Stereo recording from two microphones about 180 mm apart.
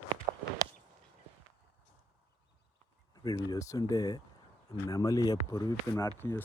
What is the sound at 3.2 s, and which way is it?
Speech, 20° left (ahead or behind).